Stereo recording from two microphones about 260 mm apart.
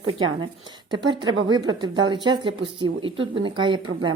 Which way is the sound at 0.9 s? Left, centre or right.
Centre.